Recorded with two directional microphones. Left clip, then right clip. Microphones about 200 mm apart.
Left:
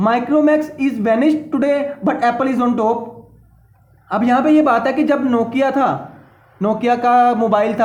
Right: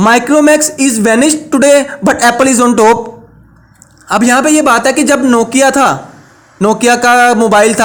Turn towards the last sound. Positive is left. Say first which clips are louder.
# right 8 dB
turn(degrees=-45)  # may be behind; listen again after turning